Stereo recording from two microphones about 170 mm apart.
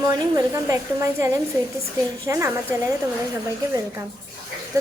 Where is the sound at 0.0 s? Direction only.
20° right (ahead or behind).